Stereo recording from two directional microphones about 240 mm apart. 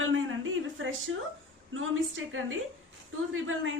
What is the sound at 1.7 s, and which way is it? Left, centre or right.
A woman's voice, right.